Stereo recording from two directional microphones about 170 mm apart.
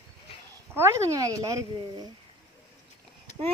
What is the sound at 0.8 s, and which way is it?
Speech, 15° right (ahead or behind).